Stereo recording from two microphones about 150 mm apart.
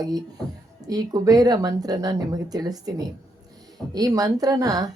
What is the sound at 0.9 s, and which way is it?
Speech, 25° right (ahead or behind).